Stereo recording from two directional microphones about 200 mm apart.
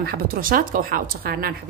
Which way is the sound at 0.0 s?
50° right (ahead or behind).